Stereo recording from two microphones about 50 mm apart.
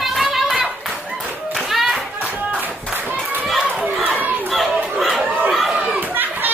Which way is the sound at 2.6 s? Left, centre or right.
Right.